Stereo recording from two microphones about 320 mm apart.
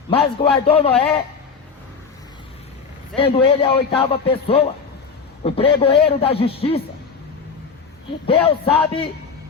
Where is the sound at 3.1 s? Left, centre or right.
Centre.